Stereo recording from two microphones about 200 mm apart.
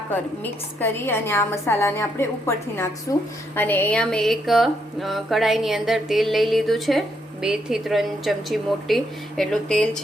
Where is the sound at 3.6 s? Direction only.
10° left (ahead or behind).